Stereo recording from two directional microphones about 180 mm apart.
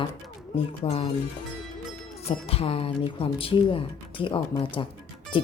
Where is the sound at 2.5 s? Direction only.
35° left (ahead or behind).